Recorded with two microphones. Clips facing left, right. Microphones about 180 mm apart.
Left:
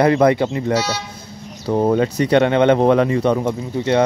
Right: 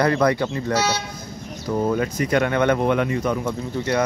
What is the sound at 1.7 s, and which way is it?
Speech, 35° left (ahead or behind).